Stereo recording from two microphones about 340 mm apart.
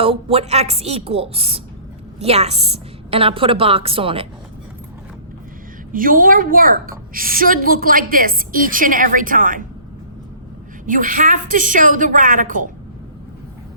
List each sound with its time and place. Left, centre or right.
0.0 s a woman's voice: centre
5.9 s a woman's voice: right
10.8 s a woman's voice: right